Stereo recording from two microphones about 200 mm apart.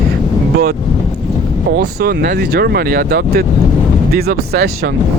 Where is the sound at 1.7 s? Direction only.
50° right (ahead or behind).